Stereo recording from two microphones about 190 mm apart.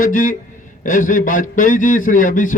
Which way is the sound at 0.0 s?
45° left (ahead or behind).